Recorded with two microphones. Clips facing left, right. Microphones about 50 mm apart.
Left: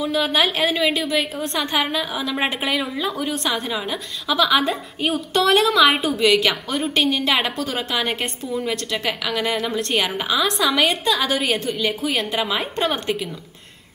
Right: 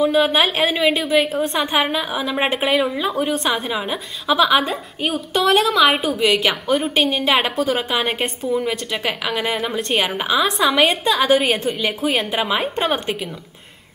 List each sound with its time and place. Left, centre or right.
0.0 s a woman's voice: centre
4.6 s a woman's voice: centre